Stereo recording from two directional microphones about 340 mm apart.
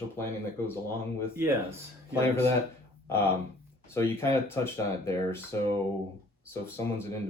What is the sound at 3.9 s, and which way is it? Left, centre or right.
Speech, centre.